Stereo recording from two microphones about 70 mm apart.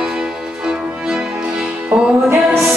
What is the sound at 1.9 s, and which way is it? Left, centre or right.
Music, right.